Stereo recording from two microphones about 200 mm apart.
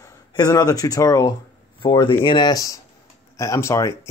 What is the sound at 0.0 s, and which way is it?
A man's voice, 15° left (ahead or behind).